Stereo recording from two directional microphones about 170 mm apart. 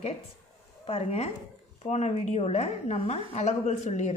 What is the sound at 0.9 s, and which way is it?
Speech, 35° left (ahead or behind).